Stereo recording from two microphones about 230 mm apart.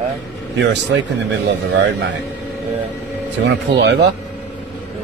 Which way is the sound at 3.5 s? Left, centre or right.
Right.